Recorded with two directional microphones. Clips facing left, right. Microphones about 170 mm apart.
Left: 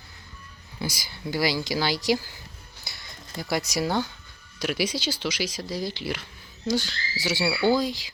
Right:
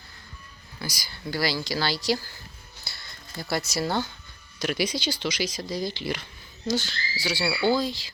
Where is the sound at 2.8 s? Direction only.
15° left (ahead or behind).